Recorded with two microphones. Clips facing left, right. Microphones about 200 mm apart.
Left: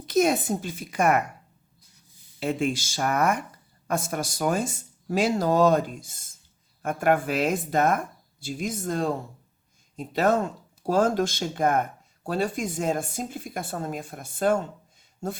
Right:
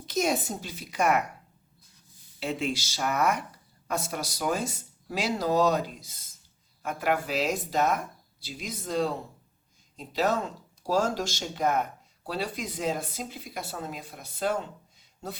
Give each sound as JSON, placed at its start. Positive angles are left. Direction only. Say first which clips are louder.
{"t": 0.0, "sound": "speech", "louder": "left 5 dB", "side_deg": 55}
{"t": 2.4, "sound": "speech", "louder": "left 4 dB", "side_deg": 50}